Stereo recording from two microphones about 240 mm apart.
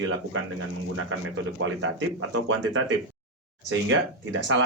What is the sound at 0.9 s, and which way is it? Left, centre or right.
Speech, right.